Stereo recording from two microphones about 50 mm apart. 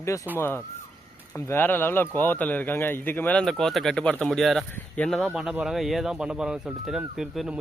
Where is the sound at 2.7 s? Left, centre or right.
Left.